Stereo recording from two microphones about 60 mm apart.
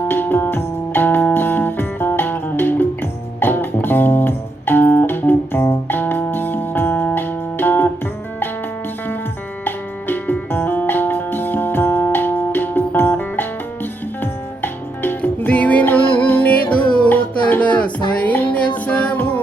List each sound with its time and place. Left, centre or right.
0.1 s music: left
9.6 s music: left
15.4 s music: left